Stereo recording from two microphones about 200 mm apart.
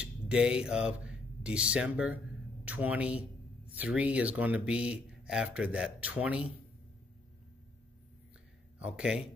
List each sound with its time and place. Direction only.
0.0 s a man's voice: 5° right (ahead or behind)
8.7 s speech: 5° right (ahead or behind)